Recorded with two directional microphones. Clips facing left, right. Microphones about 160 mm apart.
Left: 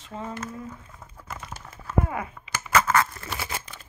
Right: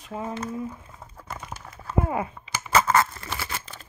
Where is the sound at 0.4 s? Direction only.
25° right (ahead or behind).